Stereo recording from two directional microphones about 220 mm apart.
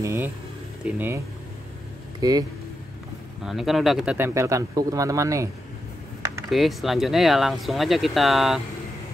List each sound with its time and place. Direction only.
0.0 s speech: 10° right (ahead or behind)
3.4 s speech: centre (ahead or behind)
6.5 s speech: centre (ahead or behind)